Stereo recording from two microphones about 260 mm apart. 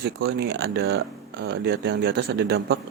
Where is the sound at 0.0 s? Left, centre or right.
Right.